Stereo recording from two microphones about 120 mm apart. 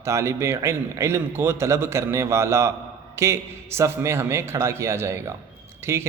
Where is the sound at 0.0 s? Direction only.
25° right (ahead or behind).